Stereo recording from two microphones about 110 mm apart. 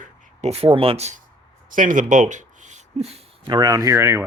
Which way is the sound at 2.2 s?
90° right.